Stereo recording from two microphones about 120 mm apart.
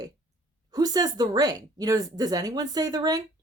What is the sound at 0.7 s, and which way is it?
A woman's voice, 30° right (ahead or behind).